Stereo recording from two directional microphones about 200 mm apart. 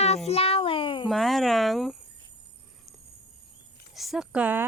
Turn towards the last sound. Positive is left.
turn(degrees=-10)  # may be behind; listen again after turning